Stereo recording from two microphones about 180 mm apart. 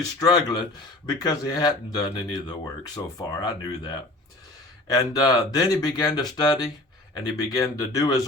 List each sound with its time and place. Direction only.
0.2 s speech: 20° left (ahead or behind)